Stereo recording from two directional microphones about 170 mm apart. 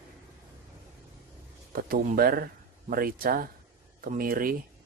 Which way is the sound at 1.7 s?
60° right (ahead or behind).